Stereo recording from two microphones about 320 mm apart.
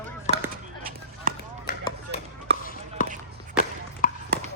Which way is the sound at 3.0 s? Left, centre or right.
Left.